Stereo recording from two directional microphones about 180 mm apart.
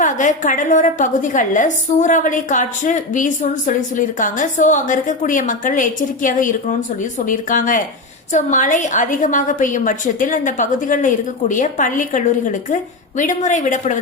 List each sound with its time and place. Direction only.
0.0 s a woman's voice: 45° left (ahead or behind)